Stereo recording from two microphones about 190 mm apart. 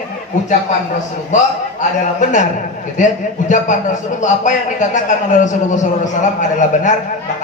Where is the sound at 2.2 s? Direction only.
40° left (ahead or behind).